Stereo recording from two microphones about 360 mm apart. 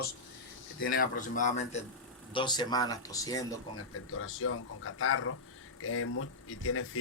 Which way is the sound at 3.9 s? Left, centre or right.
Left.